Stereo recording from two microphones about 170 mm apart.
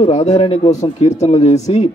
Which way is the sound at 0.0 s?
40° left (ahead or behind).